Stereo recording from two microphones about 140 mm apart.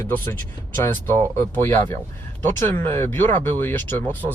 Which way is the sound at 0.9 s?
15° left (ahead or behind).